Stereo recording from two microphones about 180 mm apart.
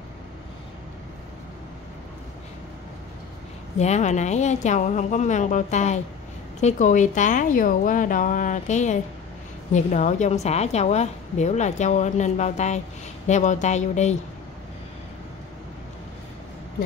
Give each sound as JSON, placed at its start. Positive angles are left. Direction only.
{"t": 3.7, "sound": "a woman's voice", "side_deg": 40}